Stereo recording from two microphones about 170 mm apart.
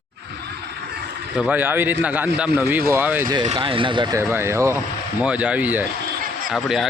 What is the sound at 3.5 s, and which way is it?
Speech, 30° right (ahead or behind).